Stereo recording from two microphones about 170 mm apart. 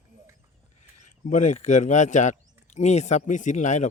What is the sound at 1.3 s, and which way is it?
Speech, 45° left (ahead or behind).